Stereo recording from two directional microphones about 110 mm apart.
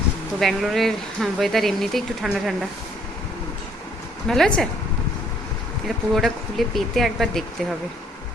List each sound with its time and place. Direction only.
0.3 s speech: centre (ahead or behind)
4.3 s speech: 5° left (ahead or behind)
6.1 s speech: centre (ahead or behind)